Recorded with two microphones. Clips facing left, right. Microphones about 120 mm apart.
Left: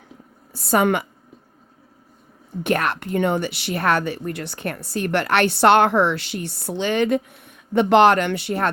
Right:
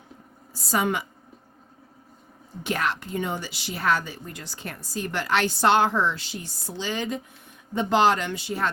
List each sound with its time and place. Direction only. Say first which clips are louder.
0.5 s a woman's voice: left 7 dB; 60° left (ahead or behind)
2.6 s a woman's voice: left 5 dB; 55° left (ahead or behind)